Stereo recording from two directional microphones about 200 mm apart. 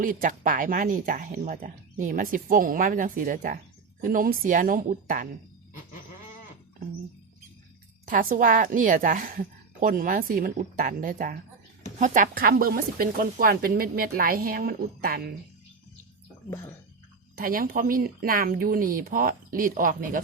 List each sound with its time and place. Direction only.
0.0 s speech: 45° right (ahead or behind)
8.0 s speech: 45° right (ahead or behind)
17.3 s speech: 45° right (ahead or behind)